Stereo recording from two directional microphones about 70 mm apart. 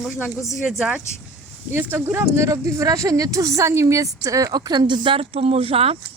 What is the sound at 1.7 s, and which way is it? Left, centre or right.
Speech, right.